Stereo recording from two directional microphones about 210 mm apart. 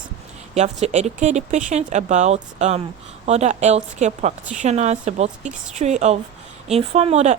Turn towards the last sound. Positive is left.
turn(degrees=-30)  # may be behind; listen again after turning